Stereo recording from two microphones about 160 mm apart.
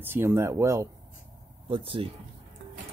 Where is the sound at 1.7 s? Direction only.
35° right (ahead or behind).